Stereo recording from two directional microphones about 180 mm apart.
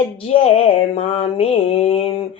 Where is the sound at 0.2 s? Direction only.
35° left (ahead or behind).